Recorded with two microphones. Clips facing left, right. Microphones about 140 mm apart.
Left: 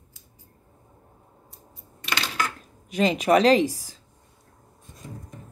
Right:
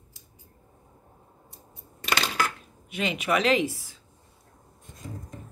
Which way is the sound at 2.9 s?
35° left (ahead or behind).